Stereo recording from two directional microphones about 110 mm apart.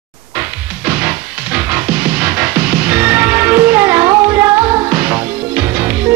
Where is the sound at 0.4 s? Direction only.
15° right (ahead or behind).